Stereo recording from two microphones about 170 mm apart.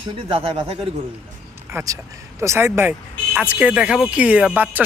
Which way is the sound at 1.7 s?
20° right (ahead or behind).